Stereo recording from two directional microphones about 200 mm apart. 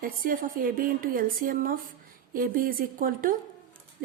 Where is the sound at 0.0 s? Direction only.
45° right (ahead or behind).